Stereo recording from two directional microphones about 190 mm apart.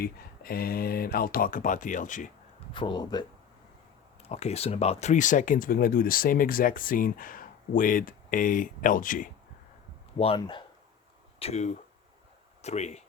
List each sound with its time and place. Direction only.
0.0 s speech: 50° left (ahead or behind)
2.7 s speech: 25° left (ahead or behind)
4.3 s speech: 35° left (ahead or behind)
10.2 s speech: 25° left (ahead or behind)